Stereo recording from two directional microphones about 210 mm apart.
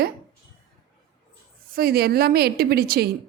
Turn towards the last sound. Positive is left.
turn(degrees=-45)  # may be behind; listen again after turning